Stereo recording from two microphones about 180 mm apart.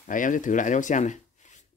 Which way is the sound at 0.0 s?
45° left (ahead or behind).